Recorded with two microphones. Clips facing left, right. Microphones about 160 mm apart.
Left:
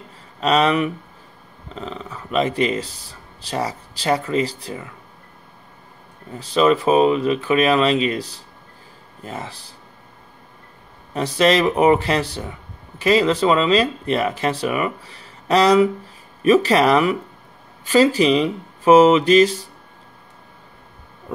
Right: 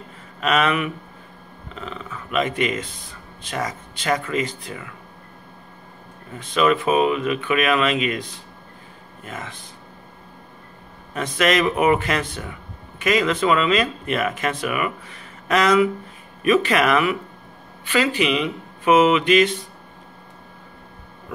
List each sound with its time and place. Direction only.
0.4 s speech: 30° left (ahead or behind)
6.3 s speech: 30° left (ahead or behind)
11.1 s speech: 30° left (ahead or behind)